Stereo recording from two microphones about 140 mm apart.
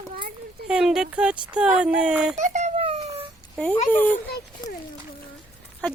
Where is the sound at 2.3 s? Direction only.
60° right (ahead or behind).